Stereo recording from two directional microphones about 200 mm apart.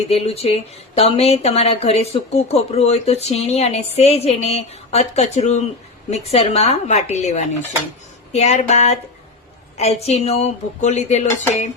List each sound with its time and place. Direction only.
0.1 s speech: 30° left (ahead or behind)